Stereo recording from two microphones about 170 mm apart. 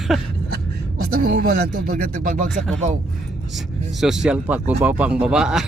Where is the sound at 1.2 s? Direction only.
60° right (ahead or behind).